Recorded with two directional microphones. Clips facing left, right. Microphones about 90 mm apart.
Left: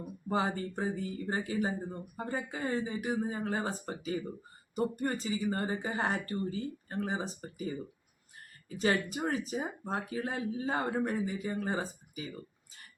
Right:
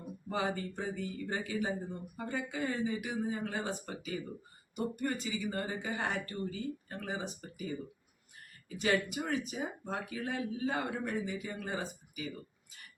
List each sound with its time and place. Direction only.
0.3 s speech: 35° left (ahead or behind)
8.7 s speech: 35° left (ahead or behind)